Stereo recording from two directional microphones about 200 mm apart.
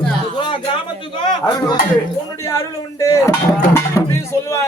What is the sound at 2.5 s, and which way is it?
Speech, 15° left (ahead or behind).